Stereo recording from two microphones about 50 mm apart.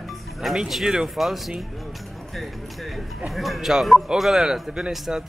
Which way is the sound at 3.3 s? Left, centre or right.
Centre.